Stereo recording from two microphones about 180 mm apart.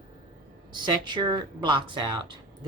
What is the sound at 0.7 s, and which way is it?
Speech, 25° right (ahead or behind).